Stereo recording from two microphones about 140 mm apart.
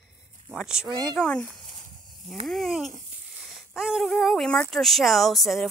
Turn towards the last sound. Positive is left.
turn(degrees=0)  # may be behind; listen again after turning